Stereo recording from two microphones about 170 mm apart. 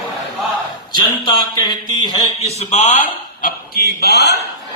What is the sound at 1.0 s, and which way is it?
Speech, 25° left (ahead or behind).